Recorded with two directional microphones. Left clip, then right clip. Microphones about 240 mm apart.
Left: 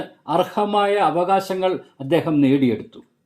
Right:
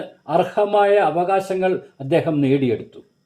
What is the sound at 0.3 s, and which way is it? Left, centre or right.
Speech, left.